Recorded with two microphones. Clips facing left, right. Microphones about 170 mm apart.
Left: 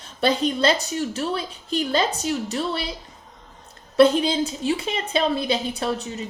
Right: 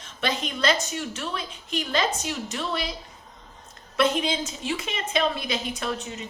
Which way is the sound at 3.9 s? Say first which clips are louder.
Left 7 dB; 35° left (ahead or behind).